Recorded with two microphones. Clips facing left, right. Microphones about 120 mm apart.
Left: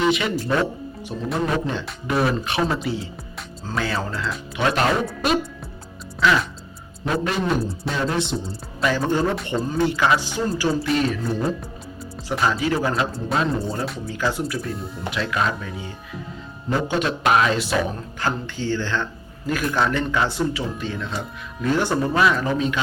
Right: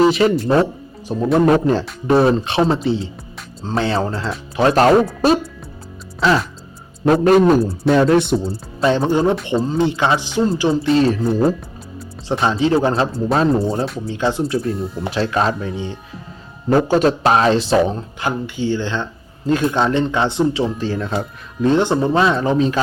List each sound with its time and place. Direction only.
0.0 s speech: 35° right (ahead or behind)
1.3 s a man's voice: 45° right (ahead or behind)
2.0 s speech: 30° right (ahead or behind)
7.1 s a man's voice: 45° right (ahead or behind)
8.8 s speech: 25° right (ahead or behind)
14.1 s speech: 25° right (ahead or behind)
16.6 s speech: 45° right (ahead or behind)